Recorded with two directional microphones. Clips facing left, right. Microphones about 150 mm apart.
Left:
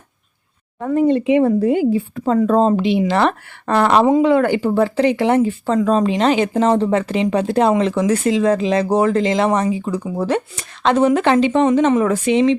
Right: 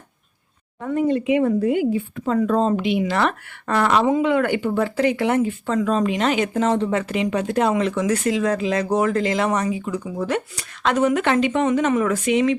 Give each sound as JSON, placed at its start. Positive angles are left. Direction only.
{"t": 0.8, "sound": "speech", "side_deg": 35}